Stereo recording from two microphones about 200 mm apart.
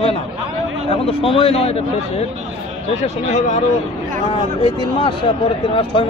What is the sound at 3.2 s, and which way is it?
Speech, 35° left (ahead or behind).